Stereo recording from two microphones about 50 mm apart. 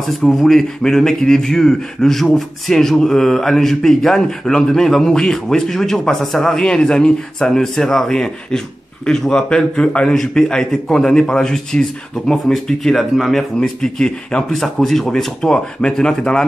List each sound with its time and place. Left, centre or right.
0.2 s speech: centre
13.6 s speech: centre